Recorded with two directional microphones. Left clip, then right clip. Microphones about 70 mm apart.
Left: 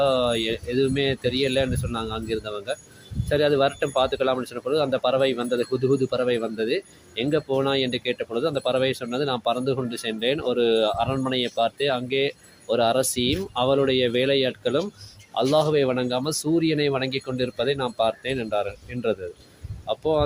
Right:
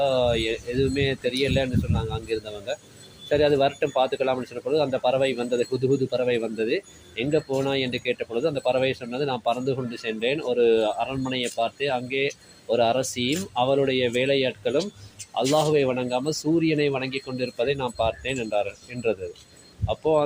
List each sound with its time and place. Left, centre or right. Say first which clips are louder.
0.0 s speech: left 1 dB; left
19.9 s speech: right 1 dB; left